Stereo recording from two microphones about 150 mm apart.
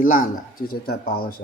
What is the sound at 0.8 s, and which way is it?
Speech, 90° left.